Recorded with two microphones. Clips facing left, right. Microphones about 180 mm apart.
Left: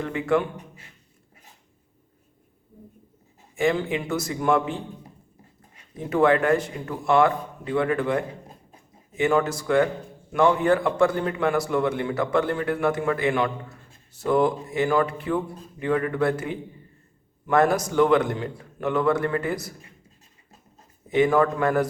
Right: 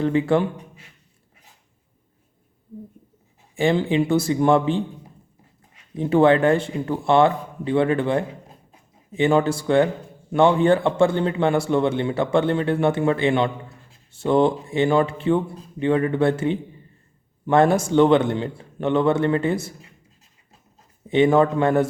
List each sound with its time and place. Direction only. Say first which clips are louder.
0.0 s speech: right 4 dB; 30° right (ahead or behind)
3.5 s a man's voice: right 4 dB; 30° right (ahead or behind)
6.0 s a man's voice: right 4 dB; 30° right (ahead or behind)
21.1 s a man's voice: right 3 dB; 25° right (ahead or behind)